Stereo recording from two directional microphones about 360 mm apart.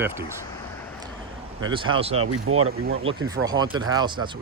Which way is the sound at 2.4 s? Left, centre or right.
Right.